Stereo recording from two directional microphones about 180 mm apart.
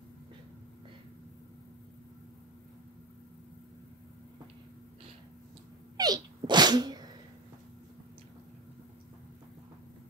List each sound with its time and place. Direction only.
5.9 s sneeze: 20° right (ahead or behind)